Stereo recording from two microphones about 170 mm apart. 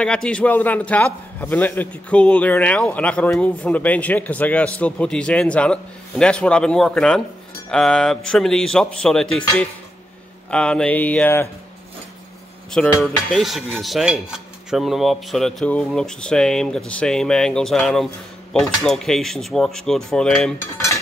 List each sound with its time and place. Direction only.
0.0 s a man's voice: 5° left (ahead or behind)
7.7 s dishes: 5° left (ahead or behind)
10.5 s a man's voice: 5° left (ahead or behind)
12.7 s dishes: 5° left (ahead or behind)